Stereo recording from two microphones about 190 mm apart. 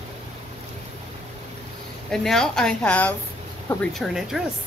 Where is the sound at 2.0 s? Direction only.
5° left (ahead or behind).